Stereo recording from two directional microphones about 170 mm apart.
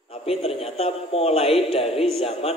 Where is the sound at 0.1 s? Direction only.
35° left (ahead or behind).